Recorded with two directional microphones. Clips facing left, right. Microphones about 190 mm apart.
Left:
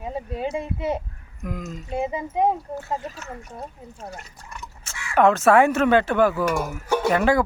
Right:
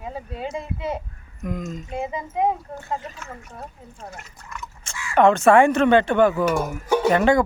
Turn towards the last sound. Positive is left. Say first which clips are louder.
# right 2 dB
turn(degrees=5)  # may be behind; listen again after turning